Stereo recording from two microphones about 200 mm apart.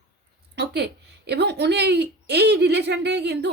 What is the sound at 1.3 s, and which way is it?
A woman's voice, 55° right (ahead or behind).